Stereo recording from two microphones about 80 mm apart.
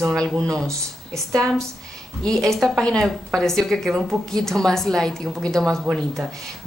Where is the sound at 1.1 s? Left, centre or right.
Right.